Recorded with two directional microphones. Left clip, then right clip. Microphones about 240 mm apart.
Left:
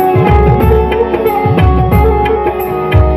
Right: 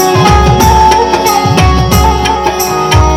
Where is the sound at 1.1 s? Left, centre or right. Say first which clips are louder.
Right 3 dB; right.